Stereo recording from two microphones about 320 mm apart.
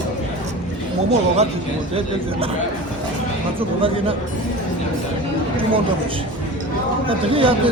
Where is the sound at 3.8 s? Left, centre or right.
Centre.